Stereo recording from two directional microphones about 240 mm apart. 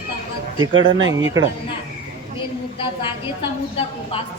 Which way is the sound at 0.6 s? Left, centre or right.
Right.